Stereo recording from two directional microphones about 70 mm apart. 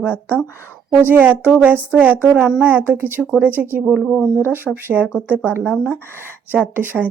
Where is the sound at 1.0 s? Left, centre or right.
Right.